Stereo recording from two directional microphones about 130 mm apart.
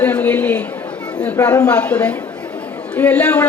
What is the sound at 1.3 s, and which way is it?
Speech, 25° left (ahead or behind).